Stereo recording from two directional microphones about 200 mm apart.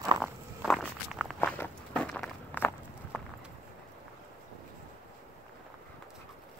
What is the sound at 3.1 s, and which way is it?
Clip-clop, 10° left (ahead or behind).